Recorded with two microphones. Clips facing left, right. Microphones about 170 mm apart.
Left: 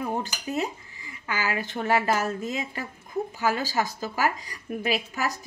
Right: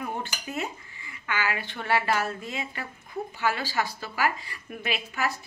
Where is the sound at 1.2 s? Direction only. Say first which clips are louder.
Left 1 dB; 40° left (ahead or behind).